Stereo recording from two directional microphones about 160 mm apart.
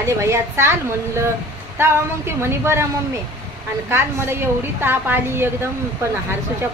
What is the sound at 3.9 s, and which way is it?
A woman's voice, 15° right (ahead or behind).